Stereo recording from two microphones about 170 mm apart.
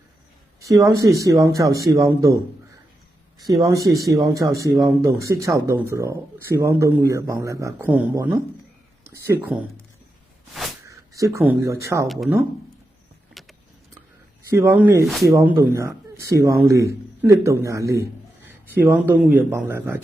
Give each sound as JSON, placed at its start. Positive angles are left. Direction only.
{"t": 0.6, "sound": "speech", "side_deg": -20}
{"t": 3.5, "sound": "speech", "side_deg": -20}
{"t": 10.8, "sound": "speech", "side_deg": -20}
{"t": 12.0, "sound": "speech", "side_deg": 0}
{"t": 13.4, "sound": "a sound", "side_deg": 0}
{"t": 14.5, "sound": "speech", "side_deg": -15}